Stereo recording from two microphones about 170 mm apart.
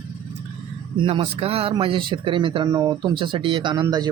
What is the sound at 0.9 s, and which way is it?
Speech, 30° right (ahead or behind).